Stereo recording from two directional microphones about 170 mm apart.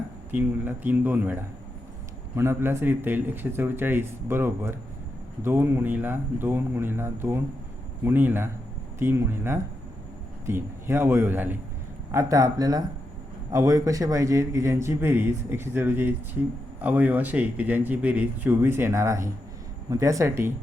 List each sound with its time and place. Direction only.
0.3 s a man's voice: 10° right (ahead or behind)